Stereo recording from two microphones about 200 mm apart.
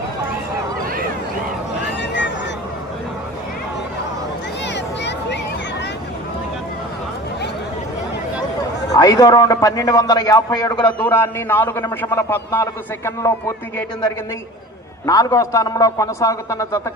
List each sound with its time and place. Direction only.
2.0 s vehicle: 60° left (ahead or behind)
4.6 s a sound: 60° left (ahead or behind)
8.9 s a man's voice: 20° left (ahead or behind)
15.0 s a man's voice: 15° left (ahead or behind)